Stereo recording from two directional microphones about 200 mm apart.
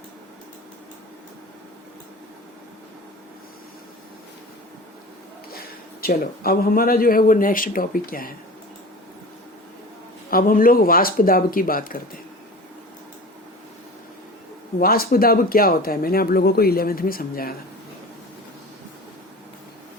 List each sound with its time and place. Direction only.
6.0 s speech: 50° left (ahead or behind)
10.2 s speech: 45° left (ahead or behind)
14.8 s speech: 50° left (ahead or behind)